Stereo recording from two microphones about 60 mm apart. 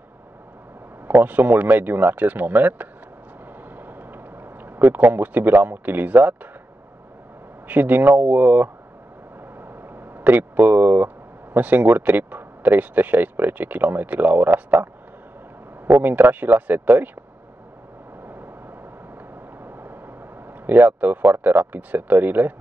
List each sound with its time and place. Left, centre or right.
1.0 s speech: right
7.6 s speech: right
9.6 s a sound: right
11.5 s speech: right
15.9 s speech: right
18.2 s vehicle: right
20.6 s speech: right